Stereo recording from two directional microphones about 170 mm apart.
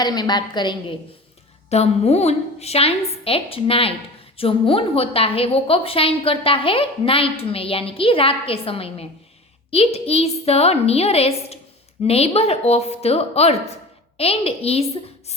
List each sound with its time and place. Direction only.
0.0 s a woman's voice: 25° left (ahead or behind)
1.7 s a woman's voice: 40° left (ahead or behind)